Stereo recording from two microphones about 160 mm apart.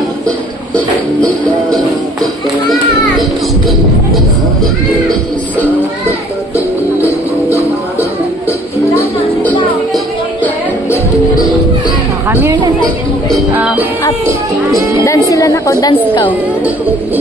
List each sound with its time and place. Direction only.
2.7 s a child's voice: centre (ahead or behind)
12.3 s a woman's voice: 15° right (ahead or behind)
13.5 s music: 10° right (ahead or behind)
15.0 s a woman's voice: 20° left (ahead or behind)